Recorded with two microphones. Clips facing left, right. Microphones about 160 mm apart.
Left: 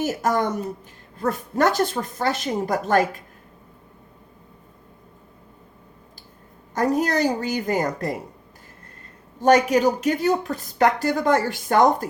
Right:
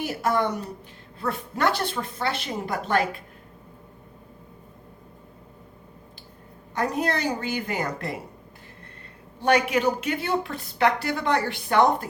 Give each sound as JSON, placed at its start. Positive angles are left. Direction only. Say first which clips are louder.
{"t": 0.0, "sound": "a woman's voice", "louder": "left 2 dB", "side_deg": 45}
{"t": 6.7, "sound": "speech", "louder": "left 5 dB", "side_deg": 40}
{"t": 9.4, "sound": "speech", "louder": "left 5 dB", "side_deg": 40}